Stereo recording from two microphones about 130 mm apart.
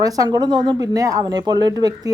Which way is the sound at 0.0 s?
30° right (ahead or behind).